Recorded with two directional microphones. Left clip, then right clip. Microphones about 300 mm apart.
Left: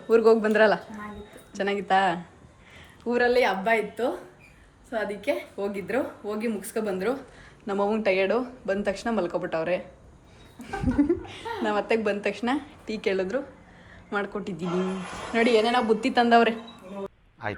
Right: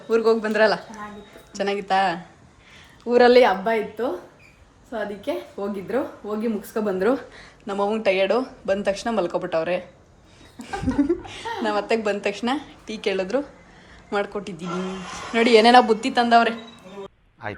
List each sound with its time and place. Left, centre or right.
0.1 s a woman's voice: centre
2.7 s a sound: centre
3.2 s a woman's voice: right
3.6 s a woman's voice: centre